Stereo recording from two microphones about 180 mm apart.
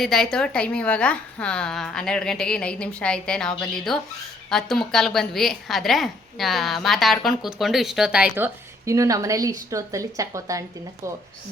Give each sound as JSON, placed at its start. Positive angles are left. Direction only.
{"t": 0.0, "sound": "a woman's voice", "side_deg": 0}
{"t": 8.9, "sound": "a woman's voice", "side_deg": -20}